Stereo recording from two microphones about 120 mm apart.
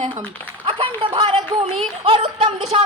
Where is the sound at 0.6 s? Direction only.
45° right (ahead or behind).